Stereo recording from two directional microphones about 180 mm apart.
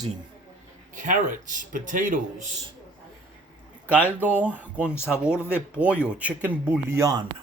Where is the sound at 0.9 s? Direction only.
45° right (ahead or behind).